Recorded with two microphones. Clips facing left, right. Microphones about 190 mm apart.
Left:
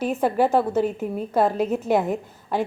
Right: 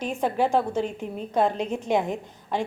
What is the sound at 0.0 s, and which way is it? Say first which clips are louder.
A woman's voice: left 4 dB; 5° left (ahead or behind).